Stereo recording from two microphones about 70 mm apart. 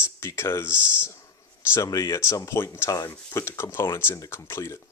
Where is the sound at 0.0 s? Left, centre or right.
Left.